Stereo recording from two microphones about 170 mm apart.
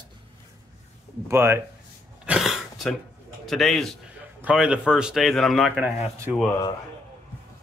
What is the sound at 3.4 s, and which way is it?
Speech, centre (ahead or behind).